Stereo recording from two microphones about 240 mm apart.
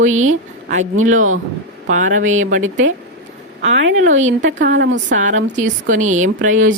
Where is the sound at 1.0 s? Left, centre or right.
Right.